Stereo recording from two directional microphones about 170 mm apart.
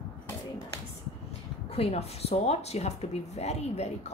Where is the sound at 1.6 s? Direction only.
35° left (ahead or behind).